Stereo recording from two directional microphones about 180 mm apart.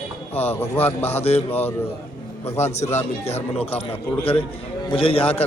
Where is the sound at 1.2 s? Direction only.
35° left (ahead or behind).